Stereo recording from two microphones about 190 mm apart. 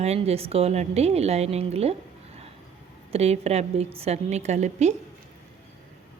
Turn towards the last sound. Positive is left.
turn(degrees=-40)  # may be behind; listen again after turning